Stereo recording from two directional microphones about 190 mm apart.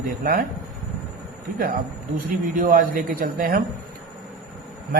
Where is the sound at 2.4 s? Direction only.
45° right (ahead or behind).